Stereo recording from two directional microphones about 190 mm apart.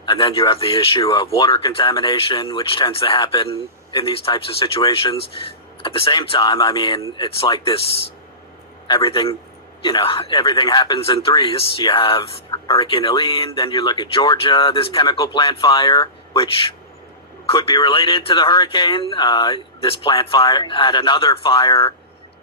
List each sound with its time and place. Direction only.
0.0 s speech: 25° left (ahead or behind)
0.9 s speech: 20° left (ahead or behind)
8.9 s speech: 20° left (ahead or behind)
17.4 s a sound: 30° left (ahead or behind)
17.7 s a man's voice: 15° left (ahead or behind)
17.9 s speech: 30° left (ahead or behind)